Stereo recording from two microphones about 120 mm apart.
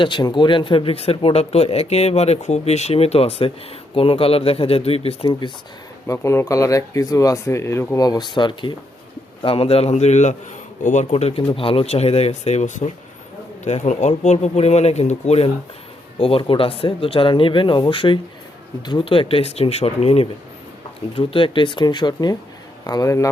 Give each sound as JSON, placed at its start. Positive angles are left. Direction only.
{"t": 0.0, "sound": "speech", "side_deg": 40}
{"t": 6.1, "sound": "speech", "side_deg": 25}
{"t": 8.0, "sound": "speech", "side_deg": 35}
{"t": 9.4, "sound": "speech", "side_deg": 50}
{"t": 16.1, "sound": "speech", "side_deg": 50}